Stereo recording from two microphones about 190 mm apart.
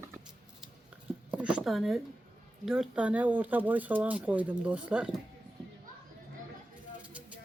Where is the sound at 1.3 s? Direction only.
5° right (ahead or behind).